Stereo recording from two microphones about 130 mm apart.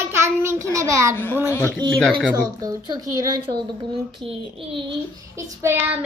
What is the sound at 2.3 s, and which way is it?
Speech, 30° right (ahead or behind).